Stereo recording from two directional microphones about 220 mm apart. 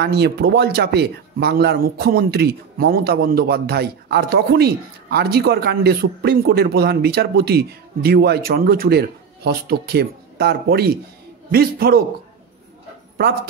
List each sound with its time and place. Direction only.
0.0 s speech: 50° right (ahead or behind)